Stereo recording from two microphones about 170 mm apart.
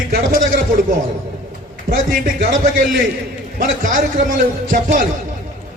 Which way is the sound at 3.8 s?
50° right (ahead or behind).